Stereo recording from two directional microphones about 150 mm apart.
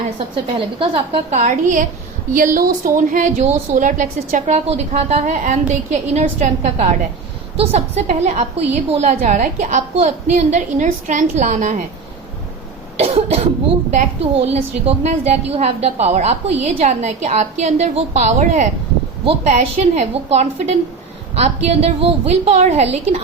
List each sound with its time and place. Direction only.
0.4 s a woman's voice: 35° right (ahead or behind)
1.4 s a woman's voice: 55° right (ahead or behind)
13.0 s cough: 45° right (ahead or behind)
13.9 s a woman's voice: 45° right (ahead or behind)
19.2 s a woman's voice: 40° right (ahead or behind)